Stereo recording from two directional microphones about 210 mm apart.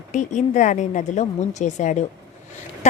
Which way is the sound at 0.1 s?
35° left (ahead or behind).